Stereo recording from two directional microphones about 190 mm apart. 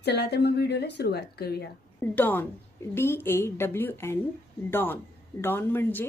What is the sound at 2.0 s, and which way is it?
Speech, 10° left (ahead or behind).